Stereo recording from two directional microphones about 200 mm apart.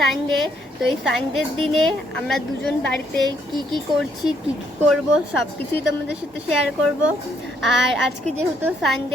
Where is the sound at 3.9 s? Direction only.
20° right (ahead or behind).